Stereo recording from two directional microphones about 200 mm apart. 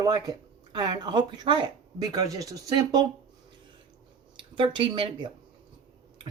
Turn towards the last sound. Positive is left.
turn(degrees=-25)  # may be behind; listen again after turning